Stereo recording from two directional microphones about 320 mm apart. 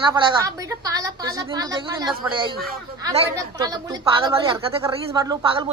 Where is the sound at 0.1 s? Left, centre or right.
Centre.